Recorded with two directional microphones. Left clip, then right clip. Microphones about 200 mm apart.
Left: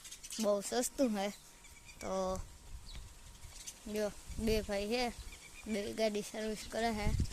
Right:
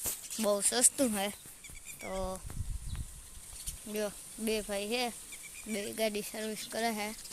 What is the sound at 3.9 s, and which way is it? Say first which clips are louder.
Speech: right 1 dB; centre (ahead or behind).